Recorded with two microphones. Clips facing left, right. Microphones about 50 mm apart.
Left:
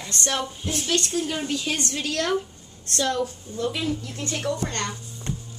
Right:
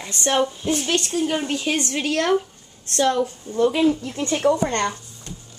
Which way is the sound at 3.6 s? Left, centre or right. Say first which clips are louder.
Right 8 dB; right.